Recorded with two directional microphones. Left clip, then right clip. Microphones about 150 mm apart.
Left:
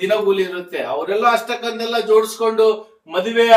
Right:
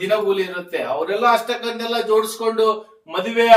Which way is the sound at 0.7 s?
15° left (ahead or behind).